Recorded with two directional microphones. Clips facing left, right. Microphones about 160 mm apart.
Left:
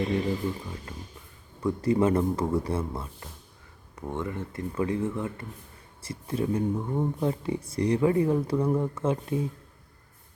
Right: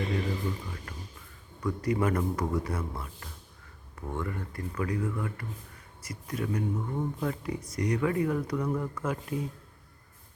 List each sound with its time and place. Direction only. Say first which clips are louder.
1.6 s speech: left 5 dB; 25° left (ahead or behind)